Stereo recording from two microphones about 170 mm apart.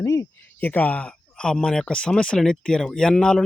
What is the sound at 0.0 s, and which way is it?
Speech, 20° left (ahead or behind).